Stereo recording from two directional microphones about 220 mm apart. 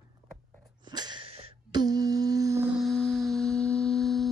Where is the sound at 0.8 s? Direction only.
20° right (ahead or behind).